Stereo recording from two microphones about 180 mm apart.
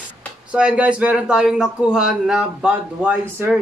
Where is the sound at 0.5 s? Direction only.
5° right (ahead or behind).